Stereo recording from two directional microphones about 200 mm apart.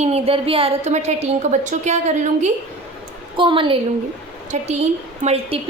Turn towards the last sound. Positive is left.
turn(degrees=-30)  # may be behind; listen again after turning